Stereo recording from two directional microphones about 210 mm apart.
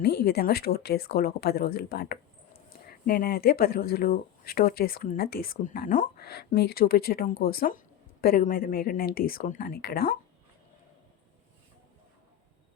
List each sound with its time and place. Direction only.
0.0 s speech: 50° left (ahead or behind)